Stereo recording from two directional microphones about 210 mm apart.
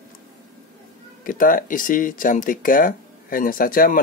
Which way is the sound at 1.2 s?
40° left (ahead or behind).